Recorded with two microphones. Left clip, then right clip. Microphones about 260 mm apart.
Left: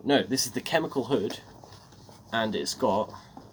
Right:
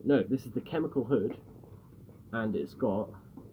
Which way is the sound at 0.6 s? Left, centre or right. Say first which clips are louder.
Left 5 dB; left.